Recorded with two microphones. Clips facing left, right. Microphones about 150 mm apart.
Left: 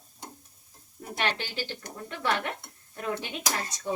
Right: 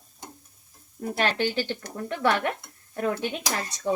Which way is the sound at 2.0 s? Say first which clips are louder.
Right 5 dB; 55° right (ahead or behind).